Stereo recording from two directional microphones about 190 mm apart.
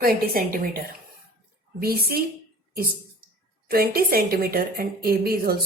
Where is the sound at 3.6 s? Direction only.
50° right (ahead or behind).